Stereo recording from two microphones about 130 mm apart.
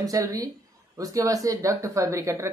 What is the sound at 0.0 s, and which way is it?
Speech, 25° right (ahead or behind).